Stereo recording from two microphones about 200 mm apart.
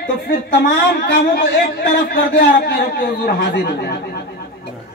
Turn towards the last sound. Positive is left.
turn(degrees=55)  # may be behind; listen again after turning